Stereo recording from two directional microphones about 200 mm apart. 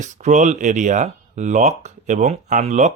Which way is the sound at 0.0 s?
35° right (ahead or behind).